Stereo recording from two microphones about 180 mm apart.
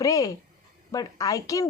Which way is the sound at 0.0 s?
20° left (ahead or behind).